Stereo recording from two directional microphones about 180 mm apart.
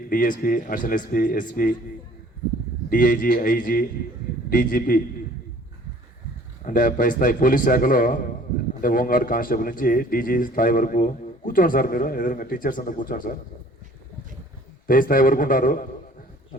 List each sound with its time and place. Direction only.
0.1 s a man's voice: 50° left (ahead or behind)
2.9 s a man's voice: 45° left (ahead or behind)
6.7 s a man's voice: 50° left (ahead or behind)
14.8 s a man's voice: 50° left (ahead or behind)